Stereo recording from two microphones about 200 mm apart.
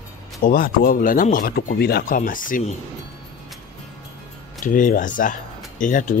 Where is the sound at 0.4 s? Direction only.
45° left (ahead or behind).